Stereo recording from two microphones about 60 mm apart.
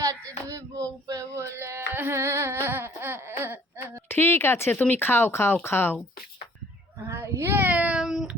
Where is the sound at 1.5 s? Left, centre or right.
Right.